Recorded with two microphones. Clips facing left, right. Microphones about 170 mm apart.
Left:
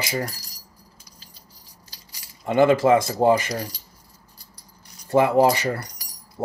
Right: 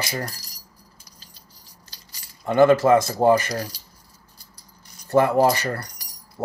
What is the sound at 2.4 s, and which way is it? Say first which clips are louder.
Speech: right 1 dB; 15° left (ahead or behind).